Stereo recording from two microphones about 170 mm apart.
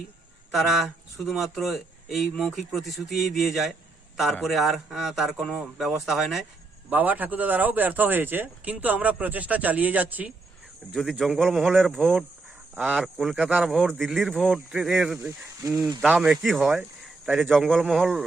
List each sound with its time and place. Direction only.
0.5 s speech: centre (ahead or behind)
15.3 s speech: 15° right (ahead or behind)
16.0 s a man's voice: 5° right (ahead or behind)
17.5 s speech: centre (ahead or behind)